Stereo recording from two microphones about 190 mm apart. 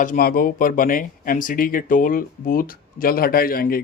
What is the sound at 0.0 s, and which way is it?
Speech, 45° left (ahead or behind).